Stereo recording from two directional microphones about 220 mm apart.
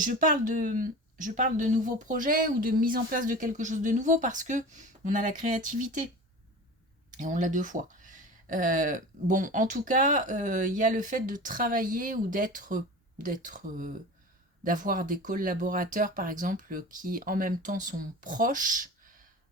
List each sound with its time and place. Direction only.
0.0 s speech: 35° right (ahead or behind)
7.2 s speech: 35° right (ahead or behind)